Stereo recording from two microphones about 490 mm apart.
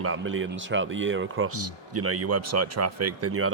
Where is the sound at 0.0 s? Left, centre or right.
Right.